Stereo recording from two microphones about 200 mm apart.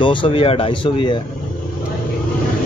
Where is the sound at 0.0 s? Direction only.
25° left (ahead or behind).